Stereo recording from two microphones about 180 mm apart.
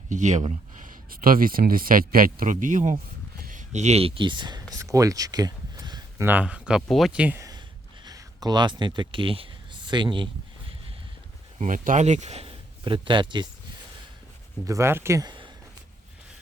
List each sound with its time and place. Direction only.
0.1 s speech: 40° right (ahead or behind); by 4.6 s 25° right (ahead or behind)
4.7 s a sound: 20° right (ahead or behind)
6.2 s speech: 10° right (ahead or behind)
8.0 s speech: 20° right (ahead or behind)
11.5 s a man's voice: 45° right (ahead or behind); by 13.5 s 25° right (ahead or behind)
14.7 s speech: 15° right (ahead or behind)